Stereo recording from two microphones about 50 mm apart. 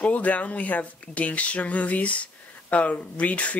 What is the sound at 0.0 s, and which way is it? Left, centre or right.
Speech, left.